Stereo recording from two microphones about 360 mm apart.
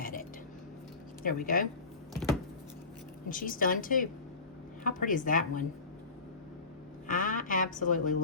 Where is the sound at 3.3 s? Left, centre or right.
Left.